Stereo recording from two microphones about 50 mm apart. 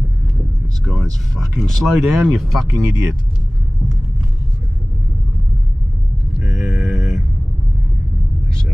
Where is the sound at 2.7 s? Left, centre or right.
Right.